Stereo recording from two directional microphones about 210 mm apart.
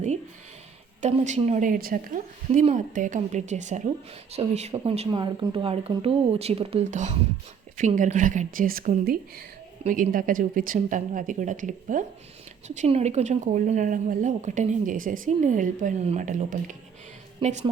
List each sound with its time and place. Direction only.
1.0 s a woman's voice: 35° right (ahead or behind)